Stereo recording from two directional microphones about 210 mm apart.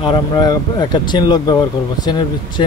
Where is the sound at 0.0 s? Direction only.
20° left (ahead or behind).